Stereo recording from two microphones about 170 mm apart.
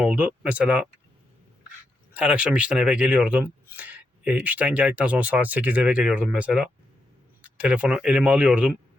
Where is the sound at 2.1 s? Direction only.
5° right (ahead or behind).